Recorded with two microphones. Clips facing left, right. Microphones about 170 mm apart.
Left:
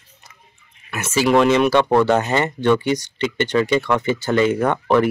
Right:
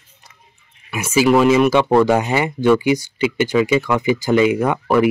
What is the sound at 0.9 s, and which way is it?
Speech, 10° right (ahead or behind).